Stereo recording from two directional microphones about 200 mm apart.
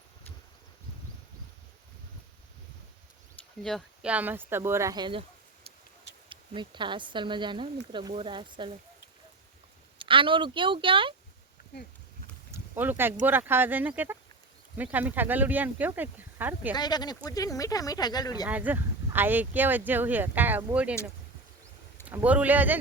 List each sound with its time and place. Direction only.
3.6 s speech: centre (ahead or behind); by 5.2 s 20° right (ahead or behind)
6.2 s speech: 25° right (ahead or behind)
10.0 s speech: 25° right (ahead or behind)
12.5 s speech: 10° right (ahead or behind)
16.7 s speech: 20° left (ahead or behind)
18.4 s speech: 10° right (ahead or behind)
22.0 s speech: 10° right (ahead or behind)